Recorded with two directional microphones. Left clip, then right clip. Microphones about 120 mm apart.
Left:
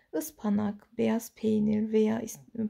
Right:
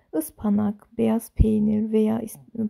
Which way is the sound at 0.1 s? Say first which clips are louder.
Right 6 dB; 50° right (ahead or behind).